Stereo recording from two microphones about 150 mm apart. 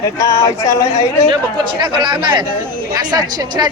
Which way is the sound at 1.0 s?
45° left (ahead or behind).